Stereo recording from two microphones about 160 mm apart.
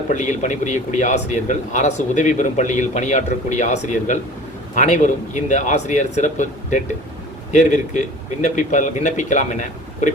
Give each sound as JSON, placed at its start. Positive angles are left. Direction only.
{"t": 0.1, "sound": "speech", "side_deg": 50}